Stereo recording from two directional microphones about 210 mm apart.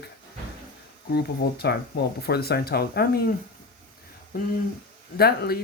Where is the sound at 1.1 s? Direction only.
50° left (ahead or behind).